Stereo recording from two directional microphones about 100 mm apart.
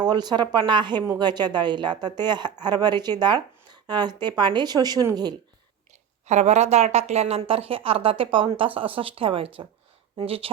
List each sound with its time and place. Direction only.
0.0 s a woman's voice: 45° right (ahead or behind)
6.4 s speech: 90° right; by 10.5 s 70° right (ahead or behind)